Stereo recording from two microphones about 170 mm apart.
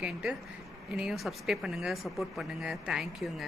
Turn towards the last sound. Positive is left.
turn(degrees=0)  # may be behind; listen again after turning